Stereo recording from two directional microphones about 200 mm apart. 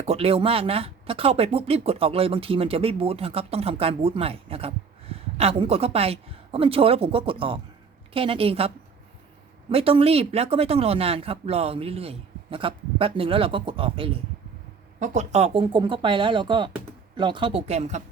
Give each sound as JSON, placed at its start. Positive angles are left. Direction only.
{"t": 0.0, "sound": "speech", "side_deg": -30}
{"t": 14.9, "sound": "speech", "side_deg": -35}